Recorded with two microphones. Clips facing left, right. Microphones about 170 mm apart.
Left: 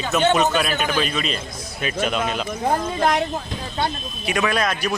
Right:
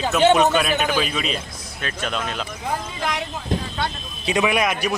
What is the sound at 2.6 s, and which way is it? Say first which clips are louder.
Speech: left 7 dB; 50° left (ahead or behind).